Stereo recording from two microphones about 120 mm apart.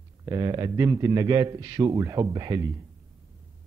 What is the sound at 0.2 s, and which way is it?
A man's voice, 30° right (ahead or behind).